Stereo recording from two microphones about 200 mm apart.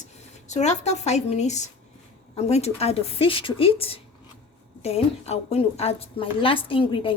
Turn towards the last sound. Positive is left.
turn(degrees=25)  # may be behind; listen again after turning